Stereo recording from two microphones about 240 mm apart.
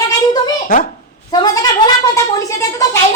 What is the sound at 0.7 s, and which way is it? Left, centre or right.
Speech, left.